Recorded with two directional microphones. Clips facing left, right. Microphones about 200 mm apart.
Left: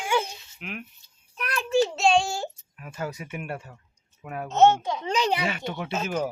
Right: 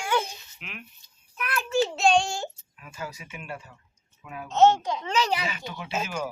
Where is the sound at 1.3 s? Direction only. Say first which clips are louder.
Even; 35° left (ahead or behind).